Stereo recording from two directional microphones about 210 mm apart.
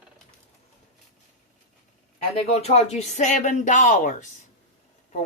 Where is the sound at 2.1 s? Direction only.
30° left (ahead or behind).